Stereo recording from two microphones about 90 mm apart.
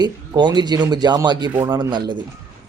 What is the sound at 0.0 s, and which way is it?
A man's voice, 55° right (ahead or behind).